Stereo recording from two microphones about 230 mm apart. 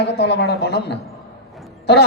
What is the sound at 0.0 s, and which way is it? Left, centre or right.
Speech, left.